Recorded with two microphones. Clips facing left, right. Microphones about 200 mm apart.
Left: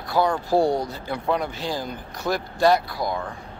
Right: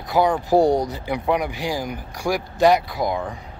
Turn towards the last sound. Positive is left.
turn(degrees=-20)  # may be behind; listen again after turning